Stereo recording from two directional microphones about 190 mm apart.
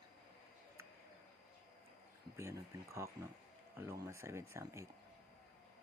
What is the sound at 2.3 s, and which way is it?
Speech, 15° right (ahead or behind).